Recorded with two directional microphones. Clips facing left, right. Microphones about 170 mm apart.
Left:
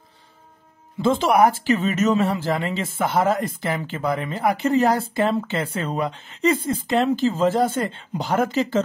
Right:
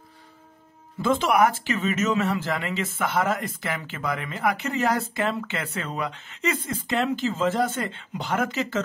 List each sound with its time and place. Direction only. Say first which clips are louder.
1.0 s speech: left 4 dB; 30° left (ahead or behind)